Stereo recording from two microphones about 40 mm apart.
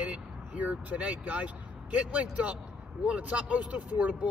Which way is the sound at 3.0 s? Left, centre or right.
Right.